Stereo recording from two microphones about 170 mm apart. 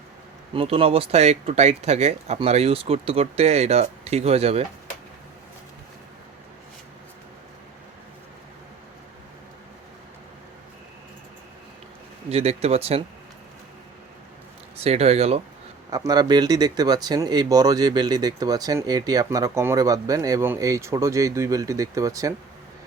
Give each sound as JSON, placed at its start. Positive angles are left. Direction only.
{"t": 0.5, "sound": "speech", "side_deg": -35}
{"t": 12.3, "sound": "speech", "side_deg": -40}
{"t": 14.8, "sound": "speech", "side_deg": -40}
{"t": 15.9, "sound": "speech", "side_deg": -20}